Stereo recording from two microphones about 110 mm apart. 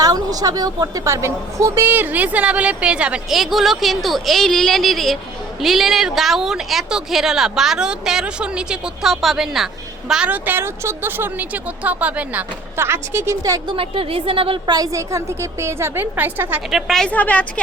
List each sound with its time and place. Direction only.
0.0 s a woman's voice: 35° right (ahead or behind)
13.4 s a woman's voice: 35° right (ahead or behind)
13.7 s a woman's voice: 55° right (ahead or behind)
14.7 s a woman's voice: 30° right (ahead or behind); by 16.6 s 15° right (ahead or behind)
16.6 s a woman's voice: 5° right (ahead or behind); by 17.4 s 15° left (ahead or behind)